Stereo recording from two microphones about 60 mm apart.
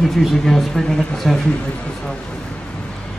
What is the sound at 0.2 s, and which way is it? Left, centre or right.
Speech, centre.